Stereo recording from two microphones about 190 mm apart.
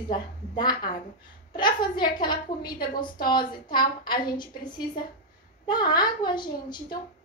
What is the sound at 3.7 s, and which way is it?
A woman's voice, 25° left (ahead or behind).